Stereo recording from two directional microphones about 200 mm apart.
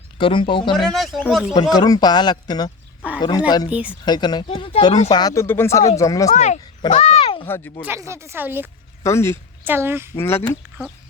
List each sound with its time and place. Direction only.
0.2 s speech: 25° left (ahead or behind)
0.8 s speech: centre (ahead or behind)
1.7 s speech: 20° left (ahead or behind)
3.7 s speech: 5° right (ahead or behind)
4.0 s speech: 20° left (ahead or behind)
5.1 s speech: 15° left (ahead or behind)
6.3 s speech: 35° left (ahead or behind)
7.4 s speech: 10° left (ahead or behind)
7.9 s speech: 15° right (ahead or behind)
9.0 s speech: 15° left (ahead or behind)
9.6 s speech: 10° right (ahead or behind)
10.2 s speech: 10° left (ahead or behind)